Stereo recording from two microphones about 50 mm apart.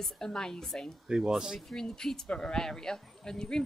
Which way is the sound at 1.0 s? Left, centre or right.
Centre.